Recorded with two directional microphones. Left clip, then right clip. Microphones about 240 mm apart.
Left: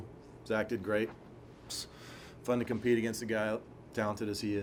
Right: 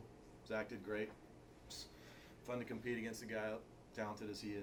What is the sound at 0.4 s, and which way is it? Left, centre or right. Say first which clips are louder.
Speech: left 11 dB; left.